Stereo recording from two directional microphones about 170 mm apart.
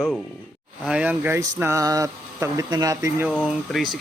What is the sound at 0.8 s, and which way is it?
Speech, 5° right (ahead or behind).